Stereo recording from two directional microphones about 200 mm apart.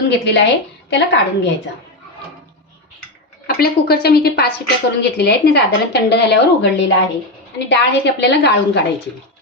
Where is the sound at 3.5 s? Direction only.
50° left (ahead or behind).